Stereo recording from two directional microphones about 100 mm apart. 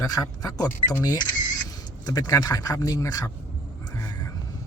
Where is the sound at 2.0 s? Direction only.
40° left (ahead or behind).